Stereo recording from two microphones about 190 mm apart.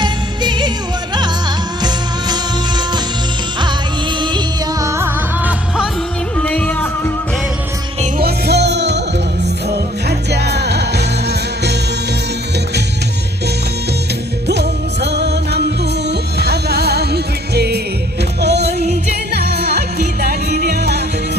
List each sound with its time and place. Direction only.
0.0 s music: 25° right (ahead or behind)
2.3 s music: 20° right (ahead or behind)
4.2 s music: 25° right (ahead or behind); by 5.9 s 5° right (ahead or behind)
6.3 s music: 5° left (ahead or behind)
8.2 s music: 60° right (ahead or behind)
10.1 s music: 60° right (ahead or behind)
14.4 s music: 60° right (ahead or behind)